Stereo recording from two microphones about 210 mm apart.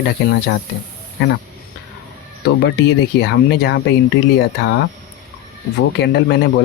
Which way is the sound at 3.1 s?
55° left (ahead or behind).